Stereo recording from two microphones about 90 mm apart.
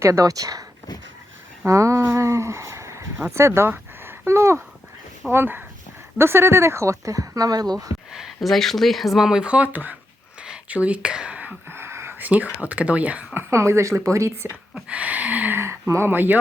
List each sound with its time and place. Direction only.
0.0 s speech: 35° right (ahead or behind)
1.6 s speech: 35° right (ahead or behind)
8.1 s speech: centre (ahead or behind); by 9.9 s 20° right (ahead or behind)
10.4 s whispering: 10° right (ahead or behind); by 12.3 s 25° right (ahead or behind)
12.6 s speech: 15° right (ahead or behind)
13.5 s speech: 30° right (ahead or behind)
14.8 s speech: 15° right (ahead or behind)